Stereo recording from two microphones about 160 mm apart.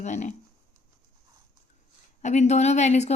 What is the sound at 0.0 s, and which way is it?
Speech, 45° left (ahead or behind).